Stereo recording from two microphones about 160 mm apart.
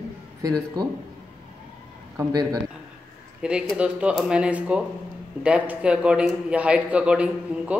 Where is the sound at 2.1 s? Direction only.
25° right (ahead or behind).